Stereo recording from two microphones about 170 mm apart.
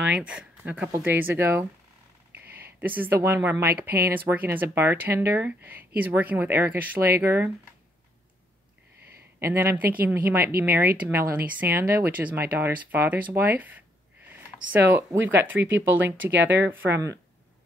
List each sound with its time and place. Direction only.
0.0 s speech: 5° right (ahead or behind)
2.4 s a sound: 65° right (ahead or behind)
2.8 s speech: 10° right (ahead or behind)
9.4 s speech: 15° right (ahead or behind)
14.3 s a sound: 10° right (ahead or behind)
15.3 s speech: 15° right (ahead or behind)
16.5 s speech: 90° right